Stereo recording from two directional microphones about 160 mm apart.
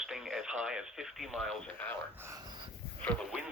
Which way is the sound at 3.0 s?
10° left (ahead or behind).